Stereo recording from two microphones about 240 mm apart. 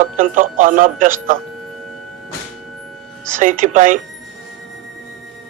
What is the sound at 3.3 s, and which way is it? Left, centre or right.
Speech, right.